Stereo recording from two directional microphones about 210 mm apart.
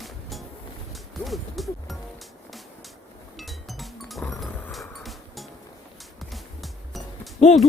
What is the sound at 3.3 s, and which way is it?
Music, centre (ahead or behind).